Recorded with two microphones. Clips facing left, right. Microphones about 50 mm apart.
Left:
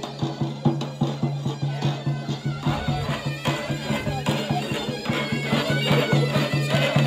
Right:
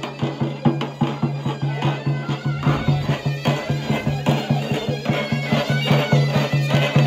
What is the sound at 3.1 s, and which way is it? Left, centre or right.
Bagpipes, centre.